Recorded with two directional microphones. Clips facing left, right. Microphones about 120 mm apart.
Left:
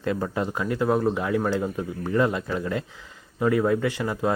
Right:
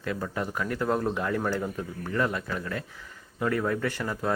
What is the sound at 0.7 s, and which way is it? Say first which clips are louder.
Speech: left 5 dB; 10° left (ahead or behind).